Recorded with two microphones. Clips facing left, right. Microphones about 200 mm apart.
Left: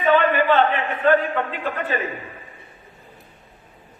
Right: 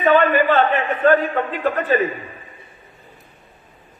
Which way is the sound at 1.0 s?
45° right (ahead or behind).